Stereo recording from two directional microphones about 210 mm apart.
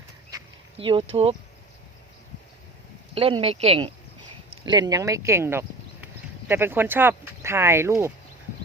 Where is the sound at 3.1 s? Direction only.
25° right (ahead or behind).